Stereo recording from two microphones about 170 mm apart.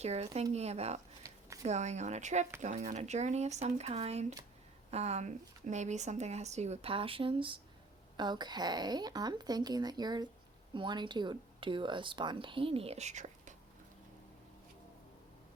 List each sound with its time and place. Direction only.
0.0 s speech: 40° right (ahead or behind)